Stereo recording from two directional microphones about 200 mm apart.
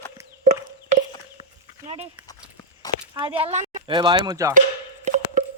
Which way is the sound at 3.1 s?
25° right (ahead or behind).